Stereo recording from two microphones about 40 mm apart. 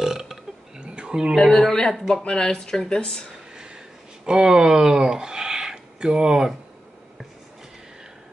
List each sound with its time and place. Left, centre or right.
0.0 s burping: centre
0.7 s a sound: right
1.3 s speech: centre
4.3 s speech: centre